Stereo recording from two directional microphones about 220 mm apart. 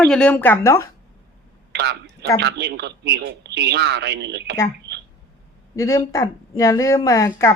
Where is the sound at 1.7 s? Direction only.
50° right (ahead or behind).